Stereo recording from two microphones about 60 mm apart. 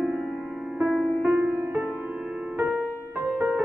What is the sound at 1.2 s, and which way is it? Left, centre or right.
Music, right.